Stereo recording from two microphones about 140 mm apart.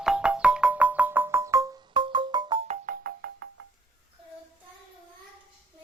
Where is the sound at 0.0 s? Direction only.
5° right (ahead or behind); by 1.8 s 25° right (ahead or behind).